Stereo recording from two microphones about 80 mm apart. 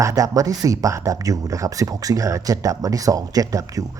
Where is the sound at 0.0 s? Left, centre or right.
Right.